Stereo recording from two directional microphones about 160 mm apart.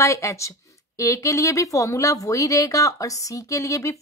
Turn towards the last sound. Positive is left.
turn(degrees=20)  # may be behind; listen again after turning